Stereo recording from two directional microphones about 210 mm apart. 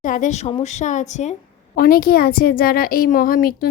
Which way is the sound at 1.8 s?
45° left (ahead or behind).